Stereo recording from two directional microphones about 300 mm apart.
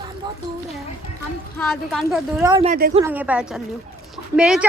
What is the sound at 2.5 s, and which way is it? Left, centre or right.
Speech, centre.